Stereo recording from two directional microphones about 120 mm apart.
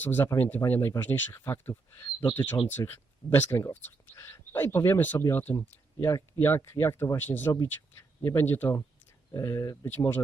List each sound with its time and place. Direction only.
0.0 s speech: 15° left (ahead or behind)